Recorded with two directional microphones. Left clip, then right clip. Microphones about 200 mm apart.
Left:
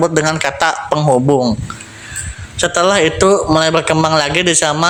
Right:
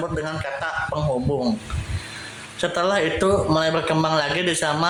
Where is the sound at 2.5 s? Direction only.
30° left (ahead or behind).